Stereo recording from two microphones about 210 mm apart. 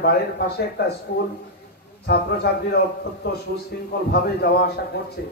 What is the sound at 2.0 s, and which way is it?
A man's voice, 50° left (ahead or behind).